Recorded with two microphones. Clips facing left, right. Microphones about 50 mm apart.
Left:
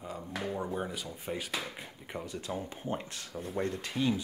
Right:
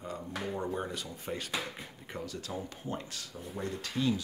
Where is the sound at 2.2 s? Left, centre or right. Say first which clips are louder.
Left 2 dB; left.